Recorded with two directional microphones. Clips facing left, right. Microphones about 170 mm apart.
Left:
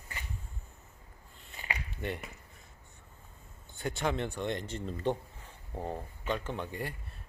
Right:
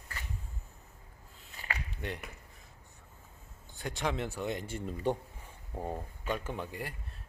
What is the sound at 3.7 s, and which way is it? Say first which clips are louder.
Speech: left 2 dB; centre (ahead or behind).